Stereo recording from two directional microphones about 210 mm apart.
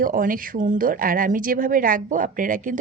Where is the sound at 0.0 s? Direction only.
40° right (ahead or behind).